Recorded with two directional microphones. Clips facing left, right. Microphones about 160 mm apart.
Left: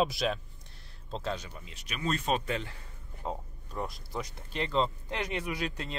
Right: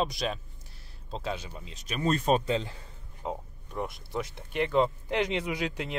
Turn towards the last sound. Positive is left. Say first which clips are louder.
# right 3 dB
turn(degrees=-15)  # may be behind; listen again after turning